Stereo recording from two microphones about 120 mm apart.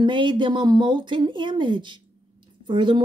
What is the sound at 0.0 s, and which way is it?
A woman's voice, 40° right (ahead or behind).